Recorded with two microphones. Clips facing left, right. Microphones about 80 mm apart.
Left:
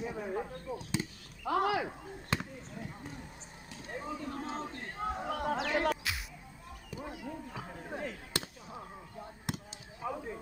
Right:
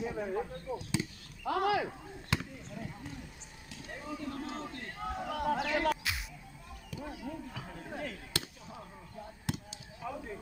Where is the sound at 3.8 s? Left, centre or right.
Left.